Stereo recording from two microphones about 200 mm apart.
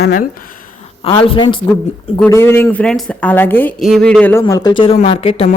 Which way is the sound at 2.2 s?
10° left (ahead or behind).